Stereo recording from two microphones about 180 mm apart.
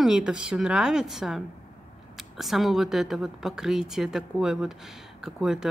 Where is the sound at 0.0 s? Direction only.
5° right (ahead or behind).